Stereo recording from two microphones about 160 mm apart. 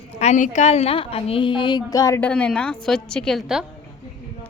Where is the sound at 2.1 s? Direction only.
10° left (ahead or behind).